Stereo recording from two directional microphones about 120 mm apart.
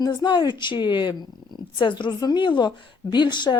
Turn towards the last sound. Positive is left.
turn(degrees=40)  # may be behind; listen again after turning